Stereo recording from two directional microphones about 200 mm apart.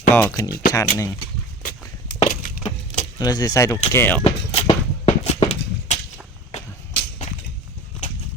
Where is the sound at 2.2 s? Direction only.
30° left (ahead or behind).